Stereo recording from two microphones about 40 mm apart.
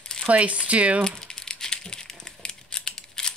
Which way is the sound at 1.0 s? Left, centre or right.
Centre.